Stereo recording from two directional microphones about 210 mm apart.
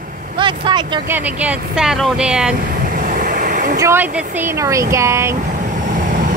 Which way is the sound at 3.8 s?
10° right (ahead or behind).